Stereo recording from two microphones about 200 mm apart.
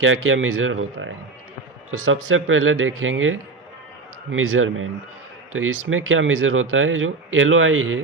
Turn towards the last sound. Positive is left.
turn(degrees=-85)